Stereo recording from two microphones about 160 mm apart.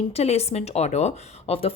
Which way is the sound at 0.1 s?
40° left (ahead or behind).